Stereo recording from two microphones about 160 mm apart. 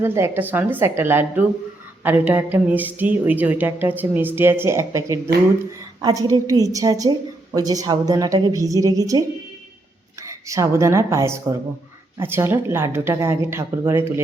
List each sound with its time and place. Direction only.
0.0 s a woman's voice: 15° right (ahead or behind)